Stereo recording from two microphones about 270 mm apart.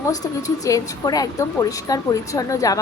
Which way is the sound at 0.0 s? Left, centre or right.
Centre.